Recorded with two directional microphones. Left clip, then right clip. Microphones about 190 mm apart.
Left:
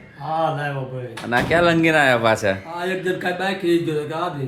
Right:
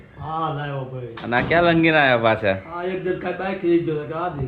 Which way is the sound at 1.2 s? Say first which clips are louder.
Even; 15° left (ahead or behind).